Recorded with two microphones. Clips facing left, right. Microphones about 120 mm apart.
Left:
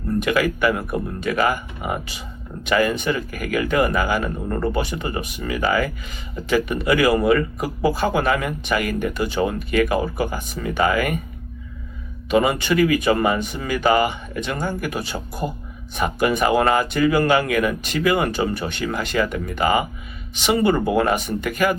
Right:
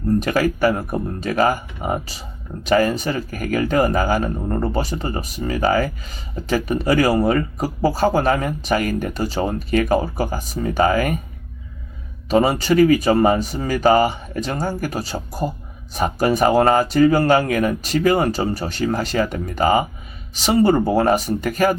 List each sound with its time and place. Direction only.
0.2 s speech: 40° right (ahead or behind)
12.3 s speech: 35° right (ahead or behind)